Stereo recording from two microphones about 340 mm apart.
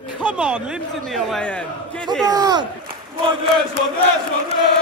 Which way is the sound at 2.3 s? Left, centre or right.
Centre.